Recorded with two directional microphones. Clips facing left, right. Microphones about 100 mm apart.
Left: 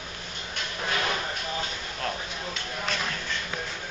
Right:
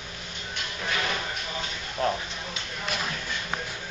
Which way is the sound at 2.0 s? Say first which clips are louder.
Right 6 dB; 15° right (ahead or behind).